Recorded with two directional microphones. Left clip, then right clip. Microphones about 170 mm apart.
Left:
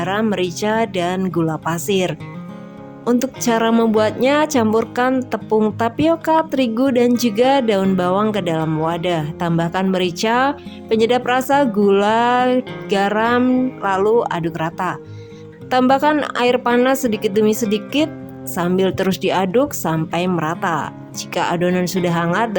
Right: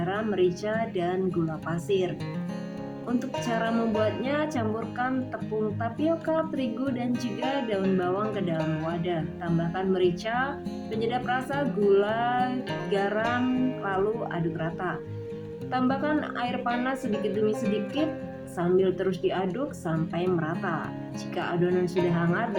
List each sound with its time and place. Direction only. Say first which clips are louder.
0.0 s a woman's voice: left 7 dB; 90° left
3.2 s a woman's voice: left 8 dB; 85° left
5.8 s a woman's voice: left 11 dB; 80° left